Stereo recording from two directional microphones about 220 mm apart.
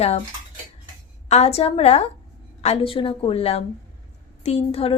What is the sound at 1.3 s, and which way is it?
A woman's voice, 30° left (ahead or behind).